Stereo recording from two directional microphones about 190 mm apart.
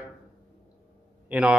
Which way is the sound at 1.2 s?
5° right (ahead or behind).